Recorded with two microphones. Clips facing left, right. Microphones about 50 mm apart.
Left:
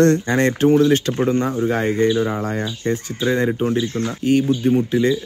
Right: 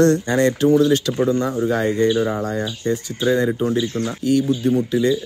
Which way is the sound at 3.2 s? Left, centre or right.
Left.